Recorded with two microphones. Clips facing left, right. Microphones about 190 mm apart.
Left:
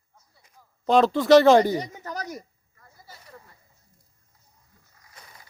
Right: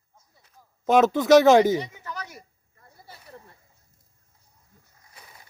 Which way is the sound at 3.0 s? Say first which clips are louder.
Right 2 dB; 25° right (ahead or behind).